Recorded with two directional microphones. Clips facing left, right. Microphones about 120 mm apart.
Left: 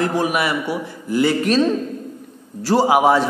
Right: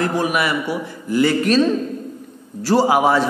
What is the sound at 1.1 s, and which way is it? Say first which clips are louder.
Speech: right 1 dB; 15° left (ahead or behind).